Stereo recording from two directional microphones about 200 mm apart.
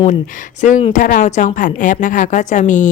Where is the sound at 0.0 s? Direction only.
40° left (ahead or behind).